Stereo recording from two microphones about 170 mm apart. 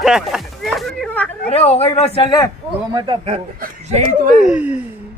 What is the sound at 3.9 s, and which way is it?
Speech, 50° right (ahead or behind).